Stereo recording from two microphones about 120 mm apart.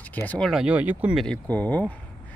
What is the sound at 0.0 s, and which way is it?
Speech, 15° left (ahead or behind).